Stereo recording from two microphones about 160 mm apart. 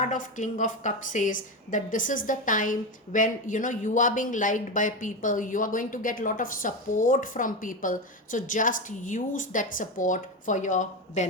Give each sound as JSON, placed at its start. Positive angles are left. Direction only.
{"t": 0.0, "sound": "a woman's voice", "side_deg": 55}